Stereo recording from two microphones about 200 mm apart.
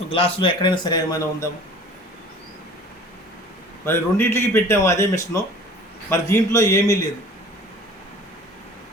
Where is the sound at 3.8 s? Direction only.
10° left (ahead or behind).